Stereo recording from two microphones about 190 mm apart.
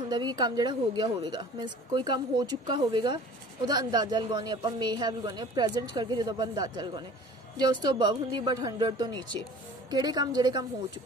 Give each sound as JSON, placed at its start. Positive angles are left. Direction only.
{"t": 0.1, "sound": "speech", "side_deg": -20}